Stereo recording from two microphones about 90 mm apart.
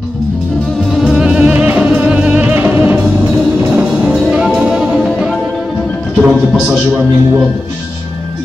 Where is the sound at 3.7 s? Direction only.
10° right (ahead or behind).